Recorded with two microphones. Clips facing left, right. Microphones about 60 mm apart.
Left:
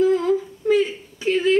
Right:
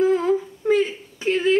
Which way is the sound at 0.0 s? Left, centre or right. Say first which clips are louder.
Left 1 dB; right.